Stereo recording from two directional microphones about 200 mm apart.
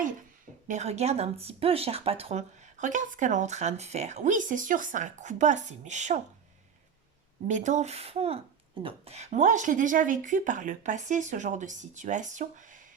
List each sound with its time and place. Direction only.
0.7 s speech: 35° right (ahead or behind)
7.4 s speech: 35° right (ahead or behind)